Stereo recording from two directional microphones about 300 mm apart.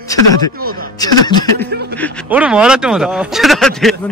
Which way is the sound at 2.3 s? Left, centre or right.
Centre.